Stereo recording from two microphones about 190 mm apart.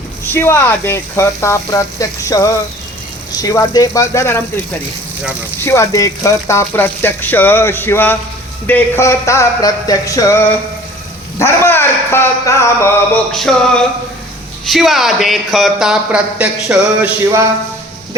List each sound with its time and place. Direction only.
0.3 s speech: 15° left (ahead or behind)
5.5 s speech: 15° left (ahead or behind)
13.3 s speech: centre (ahead or behind)